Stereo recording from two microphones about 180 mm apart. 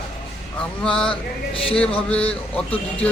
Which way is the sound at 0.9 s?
5° left (ahead or behind).